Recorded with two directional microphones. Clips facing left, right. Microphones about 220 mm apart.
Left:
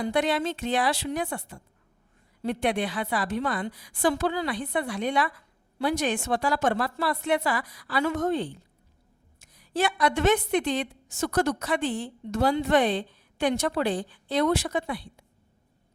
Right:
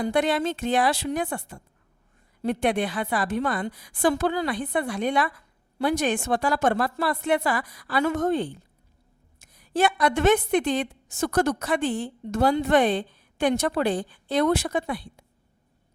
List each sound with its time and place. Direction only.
0.0 s a woman's voice: 50° right (ahead or behind)